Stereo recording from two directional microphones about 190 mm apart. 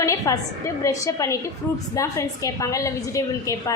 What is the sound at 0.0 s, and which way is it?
A woman's voice, 15° left (ahead or behind).